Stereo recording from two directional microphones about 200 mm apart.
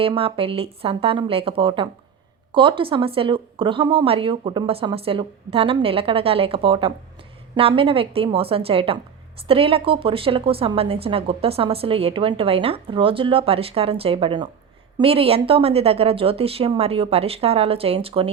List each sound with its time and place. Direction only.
0.0 s a woman's voice: 25° right (ahead or behind)